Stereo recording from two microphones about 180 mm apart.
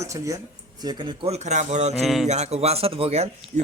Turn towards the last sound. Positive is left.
turn(degrees=-35)  # may be behind; listen again after turning